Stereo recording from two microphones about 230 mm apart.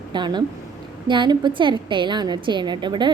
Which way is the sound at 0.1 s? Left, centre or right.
Centre.